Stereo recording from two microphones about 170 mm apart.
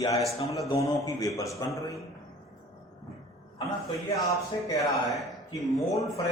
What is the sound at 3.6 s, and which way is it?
Speech, 20° left (ahead or behind).